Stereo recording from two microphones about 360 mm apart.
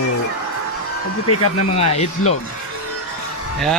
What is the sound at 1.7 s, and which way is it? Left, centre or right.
Speech, centre.